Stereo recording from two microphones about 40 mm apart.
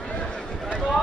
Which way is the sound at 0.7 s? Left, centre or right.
Left.